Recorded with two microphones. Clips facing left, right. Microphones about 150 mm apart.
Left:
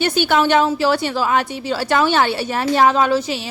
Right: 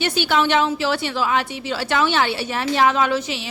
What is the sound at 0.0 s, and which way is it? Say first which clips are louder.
A woman's voice: left 3 dB; 45° left (ahead or behind).